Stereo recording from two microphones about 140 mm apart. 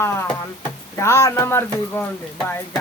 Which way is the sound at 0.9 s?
20° left (ahead or behind).